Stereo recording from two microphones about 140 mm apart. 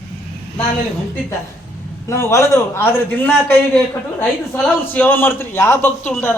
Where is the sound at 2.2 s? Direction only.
20° left (ahead or behind).